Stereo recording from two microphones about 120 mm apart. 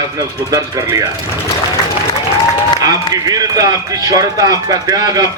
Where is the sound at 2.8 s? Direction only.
30° right (ahead or behind).